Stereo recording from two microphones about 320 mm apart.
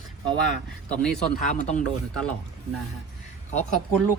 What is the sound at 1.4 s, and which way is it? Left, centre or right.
Speech, left.